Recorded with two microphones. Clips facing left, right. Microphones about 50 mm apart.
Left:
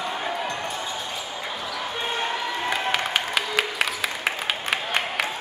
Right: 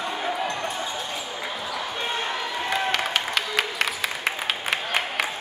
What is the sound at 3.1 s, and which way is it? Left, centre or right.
Applause, centre.